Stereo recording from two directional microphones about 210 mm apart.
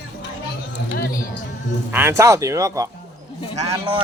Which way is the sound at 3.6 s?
30° right (ahead or behind).